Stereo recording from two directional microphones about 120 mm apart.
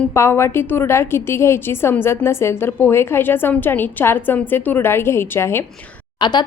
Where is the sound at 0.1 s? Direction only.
20° left (ahead or behind).